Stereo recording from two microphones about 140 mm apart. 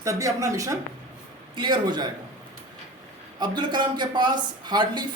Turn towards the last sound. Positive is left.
turn(degrees=-30)  # may be behind; listen again after turning